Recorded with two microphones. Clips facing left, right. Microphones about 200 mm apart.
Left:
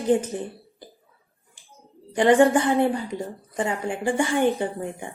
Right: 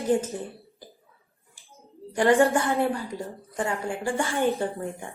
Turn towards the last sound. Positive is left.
turn(degrees=15)  # may be behind; listen again after turning